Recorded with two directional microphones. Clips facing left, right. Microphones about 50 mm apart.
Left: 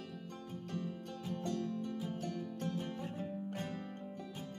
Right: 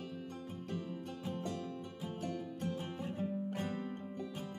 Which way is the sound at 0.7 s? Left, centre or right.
Centre.